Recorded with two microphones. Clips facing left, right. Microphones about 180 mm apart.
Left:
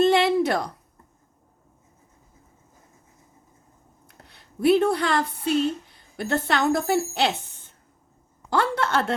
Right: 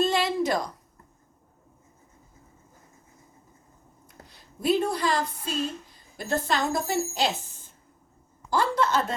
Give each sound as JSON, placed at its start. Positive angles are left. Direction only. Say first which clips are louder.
{"t": 0.0, "sound": "a sound", "louder": "left 5 dB", "side_deg": 65}
{"t": 4.3, "sound": "a woman's voice", "louder": "left 6 dB", "side_deg": 65}
{"t": 8.4, "sound": "a woman's voice", "louder": "left 1 dB", "side_deg": 65}